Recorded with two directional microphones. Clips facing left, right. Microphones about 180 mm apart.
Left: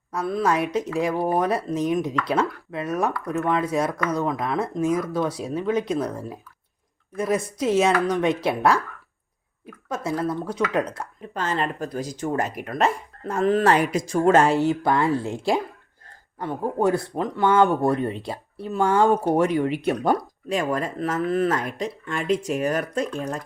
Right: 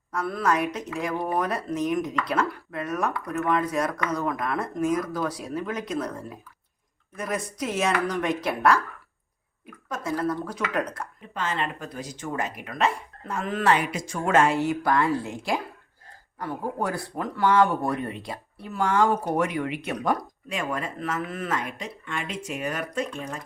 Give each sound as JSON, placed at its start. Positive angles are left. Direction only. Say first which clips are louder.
{"t": 0.1, "sound": "speech", "louder": "left 2 dB", "side_deg": 25}
{"t": 9.9, "sound": "speech", "louder": "left 2 dB", "side_deg": 25}
{"t": 11.3, "sound": "speech", "louder": "left 4 dB", "side_deg": 40}